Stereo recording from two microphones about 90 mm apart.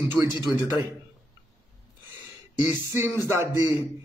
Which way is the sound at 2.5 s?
25° right (ahead or behind).